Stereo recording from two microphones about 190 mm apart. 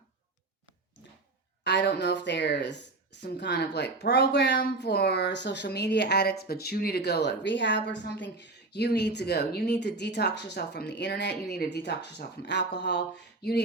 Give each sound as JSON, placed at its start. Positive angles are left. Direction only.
{"t": 1.6, "sound": "a woman's voice", "side_deg": 60}